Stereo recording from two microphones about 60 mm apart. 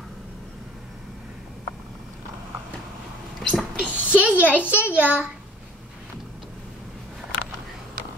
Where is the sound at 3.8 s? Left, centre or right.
Right.